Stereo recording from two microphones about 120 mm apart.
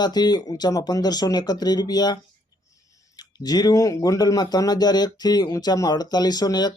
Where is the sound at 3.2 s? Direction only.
35° left (ahead or behind).